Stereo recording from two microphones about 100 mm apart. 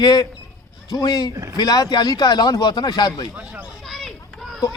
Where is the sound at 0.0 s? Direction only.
40° left (ahead or behind).